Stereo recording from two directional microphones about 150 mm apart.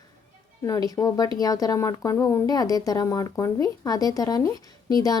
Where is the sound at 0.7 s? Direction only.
25° left (ahead or behind).